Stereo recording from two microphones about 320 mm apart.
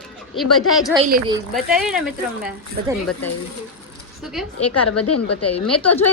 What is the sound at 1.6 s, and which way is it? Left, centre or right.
Speech, centre.